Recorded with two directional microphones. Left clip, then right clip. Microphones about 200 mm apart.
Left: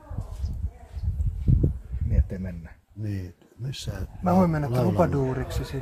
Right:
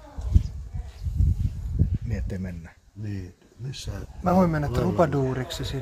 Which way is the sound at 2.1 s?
20° right (ahead or behind).